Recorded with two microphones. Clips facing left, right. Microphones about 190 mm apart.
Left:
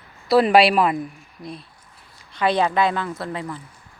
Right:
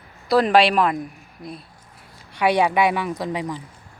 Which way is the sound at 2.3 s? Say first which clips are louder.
Right 1 dB; 10° right (ahead or behind).